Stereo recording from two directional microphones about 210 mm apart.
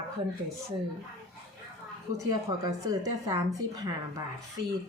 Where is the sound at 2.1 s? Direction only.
15° right (ahead or behind).